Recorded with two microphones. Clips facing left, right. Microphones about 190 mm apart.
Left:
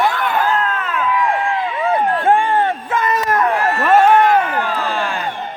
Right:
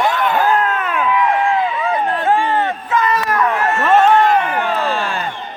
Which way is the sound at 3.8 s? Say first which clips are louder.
Even; 10° left (ahead or behind).